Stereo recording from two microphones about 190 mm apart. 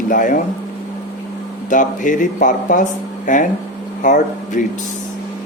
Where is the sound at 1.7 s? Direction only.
45° left (ahead or behind).